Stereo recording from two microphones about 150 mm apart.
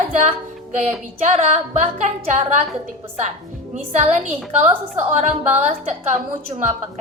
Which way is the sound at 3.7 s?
50° right (ahead or behind).